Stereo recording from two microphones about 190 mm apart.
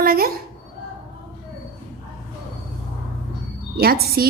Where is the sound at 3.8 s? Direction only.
55° right (ahead or behind).